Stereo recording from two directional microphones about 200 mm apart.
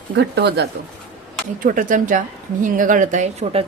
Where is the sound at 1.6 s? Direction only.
40° right (ahead or behind).